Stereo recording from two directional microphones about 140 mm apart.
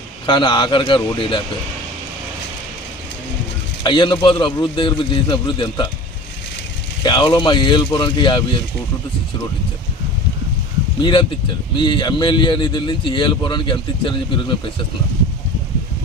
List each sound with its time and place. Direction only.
0.3 s a man's voice: 35° left (ahead or behind)
3.8 s a man's voice: 35° left (ahead or behind)
7.0 s a man's voice: 30° left (ahead or behind)
11.0 s a man's voice: 35° left (ahead or behind)